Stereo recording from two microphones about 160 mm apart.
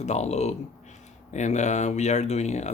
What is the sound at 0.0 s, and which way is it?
Speech, 45° left (ahead or behind).